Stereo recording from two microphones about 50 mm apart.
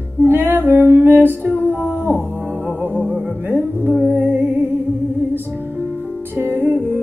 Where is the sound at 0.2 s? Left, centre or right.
Right.